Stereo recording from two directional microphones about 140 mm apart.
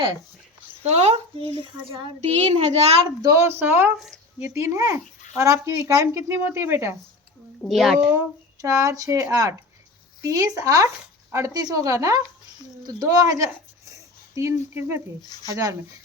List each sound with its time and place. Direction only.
0.8 s a child's voice: 50° right (ahead or behind)
3.2 s speech: 20° right (ahead or behind)
3.9 s a child's voice: centre (ahead or behind)
4.4 s speech: 20° right (ahead or behind)
7.6 s a child's voice: centre (ahead or behind)
8.6 s speech: 25° right (ahead or behind)
13.9 s a sound: 20° right (ahead or behind)
15.4 s speech: 25° right (ahead or behind)